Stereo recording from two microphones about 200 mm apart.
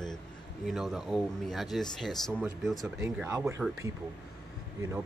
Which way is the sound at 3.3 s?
15° right (ahead or behind).